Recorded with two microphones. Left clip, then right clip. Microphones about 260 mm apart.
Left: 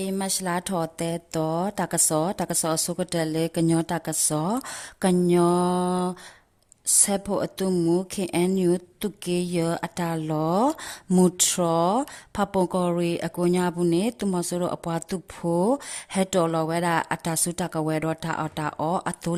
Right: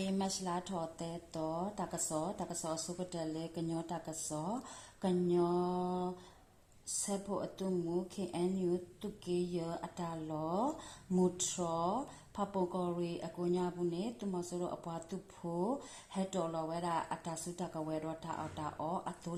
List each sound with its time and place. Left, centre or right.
0.0 s speech: left